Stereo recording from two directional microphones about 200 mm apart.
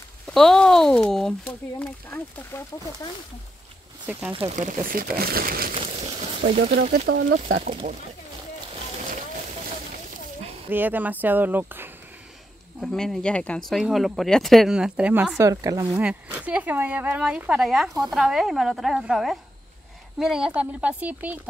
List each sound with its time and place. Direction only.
0.3 s speech: centre (ahead or behind)
4.0 s speech: 10° right (ahead or behind)
4.3 s speech: 25° right (ahead or behind)
4.6 s speech: 40° right (ahead or behind)
5.8 s a sound: 30° right (ahead or behind)
6.6 s speech: 50° right (ahead or behind)
7.3 s speech: 40° right (ahead or behind)
10.7 s speech: 10° right (ahead or behind)
12.8 s speech: centre (ahead or behind); by 16.0 s 20° right (ahead or behind)
16.0 s speech: 5° right (ahead or behind)